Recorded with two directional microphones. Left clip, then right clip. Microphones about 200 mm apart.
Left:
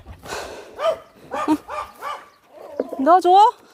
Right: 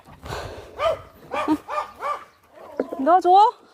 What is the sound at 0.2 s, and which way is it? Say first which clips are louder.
Dog: left 2 dB; 15° left (ahead or behind).